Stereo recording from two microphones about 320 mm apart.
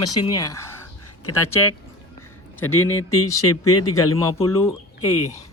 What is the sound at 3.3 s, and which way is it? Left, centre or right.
Speech, left.